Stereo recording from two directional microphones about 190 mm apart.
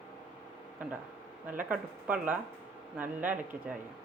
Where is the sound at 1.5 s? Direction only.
5° right (ahead or behind).